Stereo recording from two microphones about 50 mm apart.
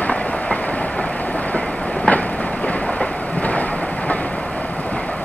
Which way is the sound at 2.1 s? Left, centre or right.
Left.